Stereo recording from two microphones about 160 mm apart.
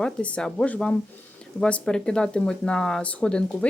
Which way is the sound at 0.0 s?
5° left (ahead or behind).